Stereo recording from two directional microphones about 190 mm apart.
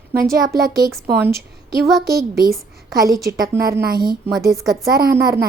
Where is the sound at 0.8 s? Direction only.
15° right (ahead or behind).